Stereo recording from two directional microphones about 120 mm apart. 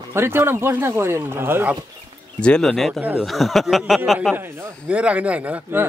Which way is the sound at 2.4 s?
5° left (ahead or behind).